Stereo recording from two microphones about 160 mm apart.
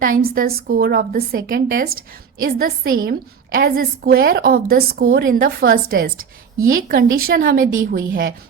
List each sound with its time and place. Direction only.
0.0 s a woman's voice: 65° right (ahead or behind)